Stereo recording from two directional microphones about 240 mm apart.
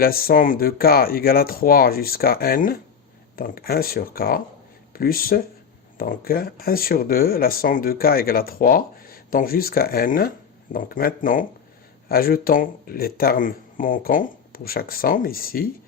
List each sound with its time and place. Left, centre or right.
0.0 s speech: left